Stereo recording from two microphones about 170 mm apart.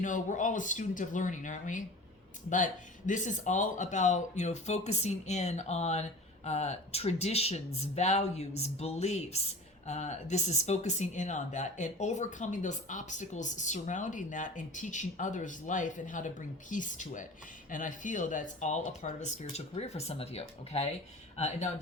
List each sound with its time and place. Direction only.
0.0 s speech: 50° left (ahead or behind)
3.1 s speech: 45° left (ahead or behind)